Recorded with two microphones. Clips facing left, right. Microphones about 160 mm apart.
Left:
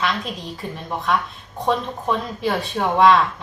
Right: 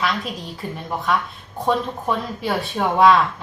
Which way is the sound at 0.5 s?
Centre (ahead or behind).